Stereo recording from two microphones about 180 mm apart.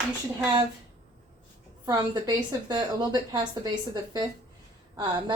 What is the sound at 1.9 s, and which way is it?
A woman's voice, 20° right (ahead or behind).